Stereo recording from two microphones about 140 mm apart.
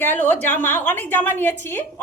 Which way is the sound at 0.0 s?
15° left (ahead or behind).